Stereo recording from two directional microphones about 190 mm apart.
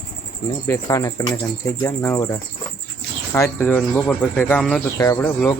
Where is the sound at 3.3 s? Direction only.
15° left (ahead or behind).